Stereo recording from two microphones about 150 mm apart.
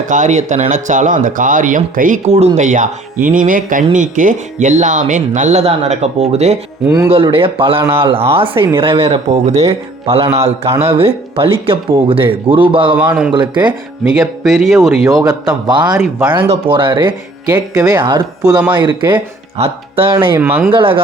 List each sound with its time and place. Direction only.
0.1 s speech: 55° right (ahead or behind)
7.1 s speech: 35° right (ahead or behind)
13.0 s speech: 5° right (ahead or behind)
13.3 s speech: 30° right (ahead or behind)
14.0 s speech: centre (ahead or behind)
15.2 s speech: 25° right (ahead or behind)
20.4 s speech: 15° right (ahead or behind)
20.7 s speech: 35° right (ahead or behind)